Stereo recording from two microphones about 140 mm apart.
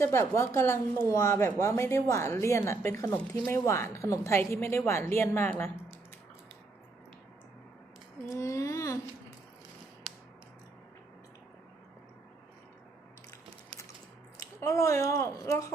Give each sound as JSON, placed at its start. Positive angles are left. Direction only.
{"t": 0.0, "sound": "a woman's voice", "side_deg": 20}
{"t": 8.3, "sound": "a woman's voice", "side_deg": 20}
{"t": 14.6, "sound": "a woman's voice", "side_deg": 20}